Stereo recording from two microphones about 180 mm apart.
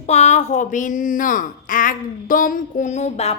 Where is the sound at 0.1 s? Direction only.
40° left (ahead or behind).